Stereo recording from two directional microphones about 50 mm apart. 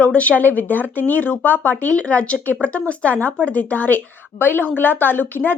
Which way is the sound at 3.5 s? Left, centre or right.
Left.